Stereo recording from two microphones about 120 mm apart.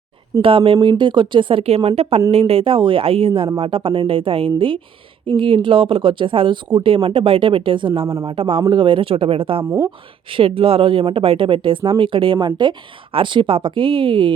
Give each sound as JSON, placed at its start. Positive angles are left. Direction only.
{"t": 0.4, "sound": "speech", "side_deg": -50}
{"t": 9.6, "sound": "speech", "side_deg": -20}
{"t": 10.2, "sound": "speech", "side_deg": -45}